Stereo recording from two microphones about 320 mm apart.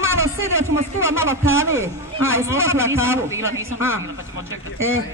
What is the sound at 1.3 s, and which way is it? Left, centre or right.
A man's voice, centre.